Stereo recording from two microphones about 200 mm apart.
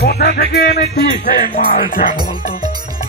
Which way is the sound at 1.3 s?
45° left (ahead or behind).